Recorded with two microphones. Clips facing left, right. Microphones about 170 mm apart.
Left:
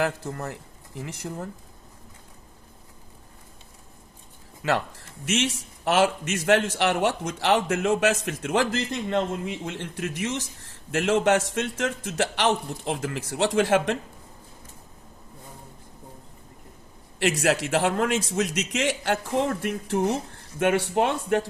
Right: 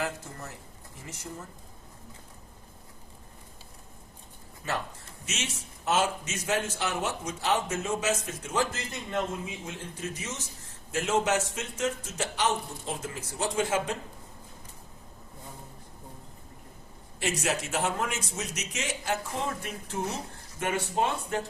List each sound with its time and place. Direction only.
0.0 s speech: 70° left (ahead or behind)
4.6 s speech: 85° left
5.8 s a man's voice: 75° left (ahead or behind)
17.2 s a man's voice: 75° left (ahead or behind)